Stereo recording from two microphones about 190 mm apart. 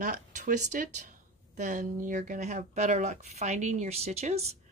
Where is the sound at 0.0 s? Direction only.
45° right (ahead or behind).